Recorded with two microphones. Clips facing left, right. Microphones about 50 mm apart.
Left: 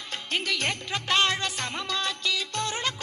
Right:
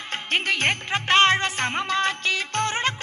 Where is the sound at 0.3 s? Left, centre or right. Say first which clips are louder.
Right 5 dB; right.